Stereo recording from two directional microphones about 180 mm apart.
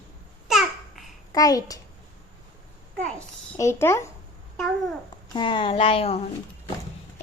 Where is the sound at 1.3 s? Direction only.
20° left (ahead or behind).